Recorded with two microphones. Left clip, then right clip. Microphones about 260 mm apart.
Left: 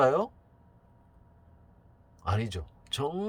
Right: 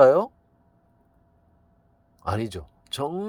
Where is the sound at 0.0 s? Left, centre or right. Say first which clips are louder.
Right 8 dB; right.